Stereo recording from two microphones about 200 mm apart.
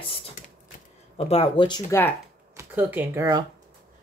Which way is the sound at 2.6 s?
10° right (ahead or behind).